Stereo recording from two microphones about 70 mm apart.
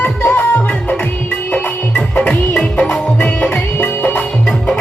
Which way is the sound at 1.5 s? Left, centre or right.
Centre.